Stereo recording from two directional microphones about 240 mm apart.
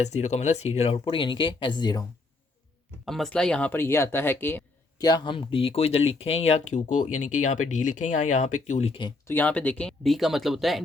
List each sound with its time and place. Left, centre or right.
0.0 s speech: left
3.1 s speech: centre